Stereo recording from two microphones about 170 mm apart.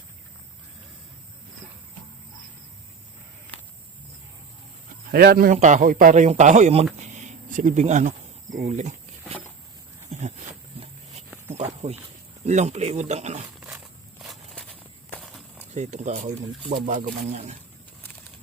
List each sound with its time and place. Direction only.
5.1 s a man's voice: 65° right (ahead or behind)
5.5 s speech: 45° right (ahead or behind)
10.1 s a sound: 40° right (ahead or behind)
11.5 s speech: 40° right (ahead or behind)
13.6 s walk: 5° right (ahead or behind)
15.2 s a sound: centre (ahead or behind)
15.7 s speech: 45° right (ahead or behind)